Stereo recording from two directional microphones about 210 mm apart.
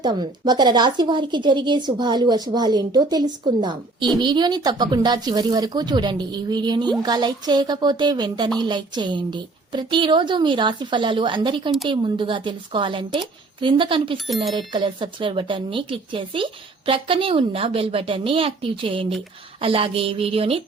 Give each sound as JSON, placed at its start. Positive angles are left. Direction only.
{"t": 0.0, "sound": "speech", "side_deg": -20}